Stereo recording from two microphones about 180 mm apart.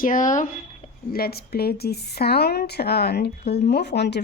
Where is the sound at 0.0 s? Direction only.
45° left (ahead or behind).